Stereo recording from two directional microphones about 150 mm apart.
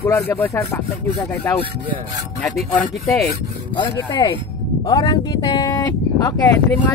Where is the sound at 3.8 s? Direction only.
30° left (ahead or behind).